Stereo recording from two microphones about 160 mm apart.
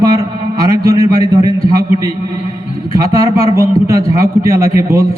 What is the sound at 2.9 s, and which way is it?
A man's voice, 20° right (ahead or behind).